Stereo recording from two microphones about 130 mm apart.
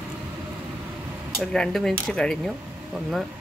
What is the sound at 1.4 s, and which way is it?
Speech, 5° left (ahead or behind).